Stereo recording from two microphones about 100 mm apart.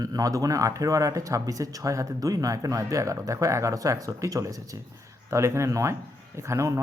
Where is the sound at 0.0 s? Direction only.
35° right (ahead or behind).